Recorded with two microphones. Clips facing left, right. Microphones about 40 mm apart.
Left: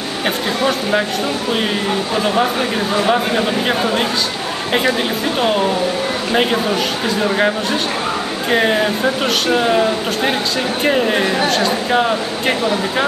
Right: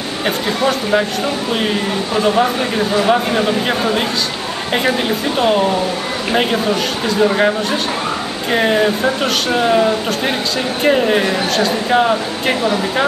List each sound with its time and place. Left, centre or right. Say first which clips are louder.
0.6 s speech: right 2 dB; centre
2.1 s speech: right 3 dB; centre
5.4 s speech: right 2 dB; centre